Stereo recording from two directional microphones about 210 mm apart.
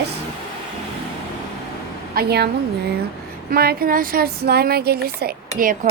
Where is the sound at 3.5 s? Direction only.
45° right (ahead or behind).